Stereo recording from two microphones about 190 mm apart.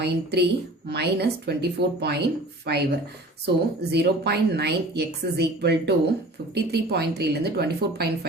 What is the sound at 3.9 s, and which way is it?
A woman's voice, 60° right (ahead or behind).